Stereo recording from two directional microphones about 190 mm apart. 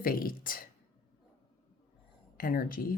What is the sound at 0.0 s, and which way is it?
Speech, 50° left (ahead or behind).